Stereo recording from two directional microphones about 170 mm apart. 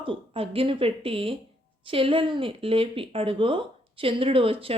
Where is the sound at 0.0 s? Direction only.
30° right (ahead or behind).